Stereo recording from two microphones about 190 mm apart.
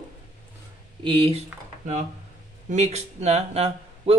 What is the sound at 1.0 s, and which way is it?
Speech, 30° right (ahead or behind).